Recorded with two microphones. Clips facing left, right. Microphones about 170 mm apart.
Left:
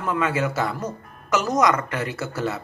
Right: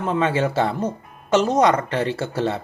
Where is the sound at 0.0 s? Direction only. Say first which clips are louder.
Right 3 dB; 30° right (ahead or behind).